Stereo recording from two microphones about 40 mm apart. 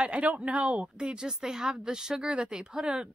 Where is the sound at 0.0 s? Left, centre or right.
Right.